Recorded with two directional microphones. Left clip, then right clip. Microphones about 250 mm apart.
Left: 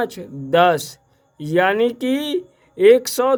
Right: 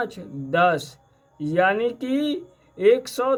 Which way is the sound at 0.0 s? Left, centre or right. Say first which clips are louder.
Left 5 dB; left.